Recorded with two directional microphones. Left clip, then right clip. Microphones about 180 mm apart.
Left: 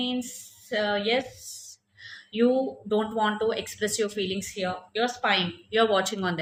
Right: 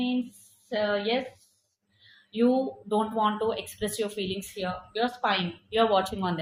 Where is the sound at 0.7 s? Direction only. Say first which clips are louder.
Left 1 dB; 25° left (ahead or behind).